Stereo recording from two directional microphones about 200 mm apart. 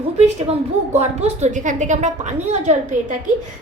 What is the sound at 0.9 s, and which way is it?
A woman's voice, 35° right (ahead or behind).